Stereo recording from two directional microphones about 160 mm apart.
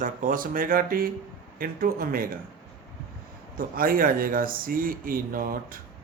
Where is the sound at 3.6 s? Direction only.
65° right (ahead or behind).